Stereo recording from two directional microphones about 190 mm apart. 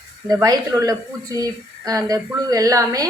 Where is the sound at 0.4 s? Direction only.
20° right (ahead or behind).